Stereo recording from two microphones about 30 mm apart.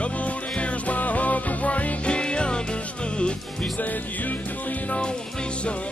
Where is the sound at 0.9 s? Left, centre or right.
Left.